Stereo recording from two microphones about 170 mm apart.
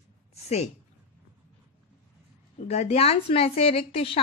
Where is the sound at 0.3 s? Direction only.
40° left (ahead or behind).